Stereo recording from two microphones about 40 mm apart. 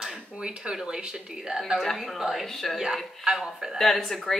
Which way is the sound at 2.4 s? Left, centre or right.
Centre.